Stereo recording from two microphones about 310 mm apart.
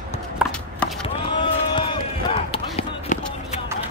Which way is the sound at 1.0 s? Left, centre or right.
Centre.